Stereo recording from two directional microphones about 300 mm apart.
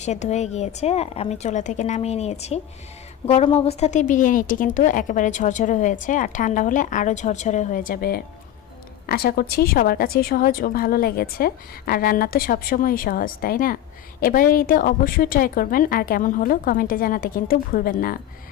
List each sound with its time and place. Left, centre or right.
0.0 s a woman's voice: left